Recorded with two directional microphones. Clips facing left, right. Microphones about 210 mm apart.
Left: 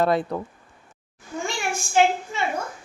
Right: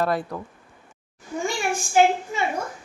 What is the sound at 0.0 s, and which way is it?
Speech, 20° left (ahead or behind).